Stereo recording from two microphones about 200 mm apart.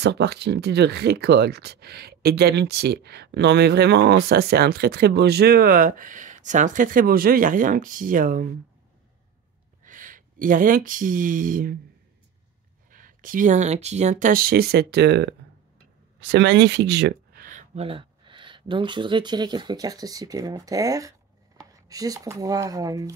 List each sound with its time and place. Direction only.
0.0 s speech: 55° right (ahead or behind)
9.8 s speech: 40° right (ahead or behind)
12.9 s speech: 45° right (ahead or behind)
17.8 s speech: 25° right (ahead or behind)